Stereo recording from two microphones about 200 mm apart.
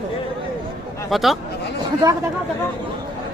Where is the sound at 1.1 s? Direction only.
Centre (ahead or behind).